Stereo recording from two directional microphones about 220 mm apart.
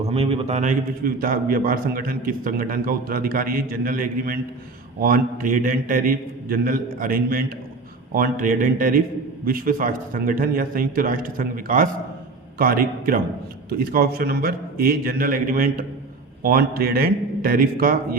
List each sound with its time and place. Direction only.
0.0 s a man's voice: 25° right (ahead or behind)